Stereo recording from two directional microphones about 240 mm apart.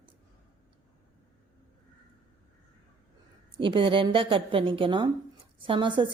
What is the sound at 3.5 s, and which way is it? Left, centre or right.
A woman's voice, right.